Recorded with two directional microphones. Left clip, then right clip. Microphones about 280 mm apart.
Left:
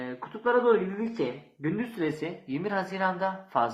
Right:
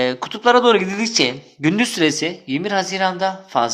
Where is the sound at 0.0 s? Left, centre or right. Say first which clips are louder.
Right 13 dB; right.